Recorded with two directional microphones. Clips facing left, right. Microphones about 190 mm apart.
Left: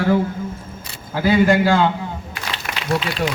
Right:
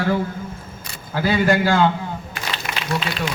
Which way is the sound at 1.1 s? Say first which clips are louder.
Left 3 dB; 15° left (ahead or behind).